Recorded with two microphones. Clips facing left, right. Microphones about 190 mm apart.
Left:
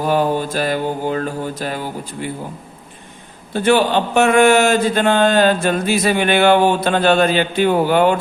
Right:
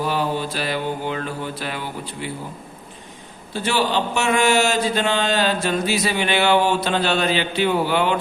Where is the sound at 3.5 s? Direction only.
55° left (ahead or behind).